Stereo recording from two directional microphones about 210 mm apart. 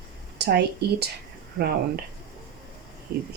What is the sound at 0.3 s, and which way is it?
Speech, 50° right (ahead or behind).